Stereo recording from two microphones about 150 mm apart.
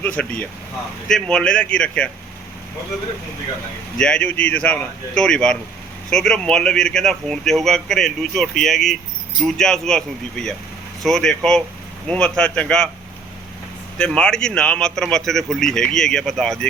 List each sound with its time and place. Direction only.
0.0 s speech: 10° left (ahead or behind)
3.9 s speech: 5° left (ahead or behind)
14.0 s speech: 5° left (ahead or behind)